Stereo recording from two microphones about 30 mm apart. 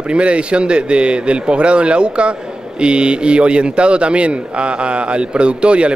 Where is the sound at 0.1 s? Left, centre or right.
Right.